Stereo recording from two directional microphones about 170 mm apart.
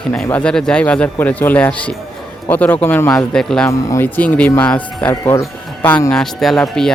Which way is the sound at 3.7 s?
20° left (ahead or behind).